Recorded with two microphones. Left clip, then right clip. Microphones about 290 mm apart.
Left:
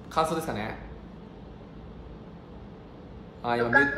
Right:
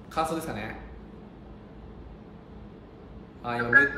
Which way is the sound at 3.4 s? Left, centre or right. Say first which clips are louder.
Left 4 dB; centre.